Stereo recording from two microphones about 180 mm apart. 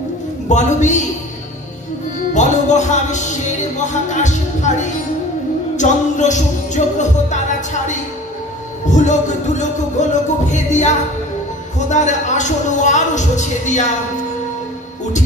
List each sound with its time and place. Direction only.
0.5 s speech: 40° left (ahead or behind)
2.3 s speech: 40° left (ahead or behind)
5.8 s music: 40° left (ahead or behind)
10.0 s speech: 40° left (ahead or behind)